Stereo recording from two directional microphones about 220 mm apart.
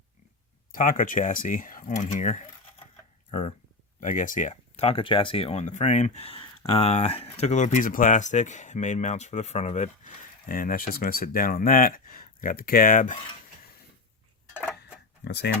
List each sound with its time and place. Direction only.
0.7 s speech: 40° left (ahead or behind)
4.0 s speech: 35° left (ahead or behind)
15.2 s speech: 50° left (ahead or behind)